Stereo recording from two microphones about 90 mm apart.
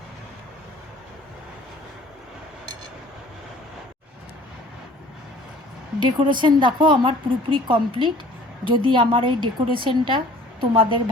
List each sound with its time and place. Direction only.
6.0 s speech: 60° right (ahead or behind)
7.5 s a woman's voice: 70° right (ahead or behind)